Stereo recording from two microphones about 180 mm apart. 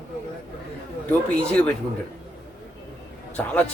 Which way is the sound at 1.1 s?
5° left (ahead or behind).